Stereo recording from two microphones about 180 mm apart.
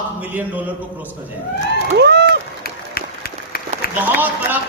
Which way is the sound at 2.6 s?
60° left (ahead or behind).